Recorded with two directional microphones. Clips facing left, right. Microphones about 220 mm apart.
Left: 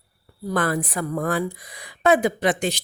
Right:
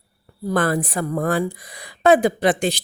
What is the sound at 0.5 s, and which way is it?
A woman's voice, 30° right (ahead or behind).